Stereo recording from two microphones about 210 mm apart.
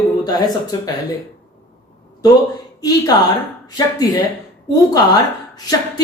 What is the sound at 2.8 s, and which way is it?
A woman's voice, 15° left (ahead or behind).